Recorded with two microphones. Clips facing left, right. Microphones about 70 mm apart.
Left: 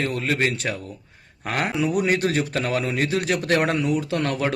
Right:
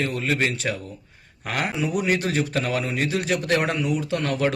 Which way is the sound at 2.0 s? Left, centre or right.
Left.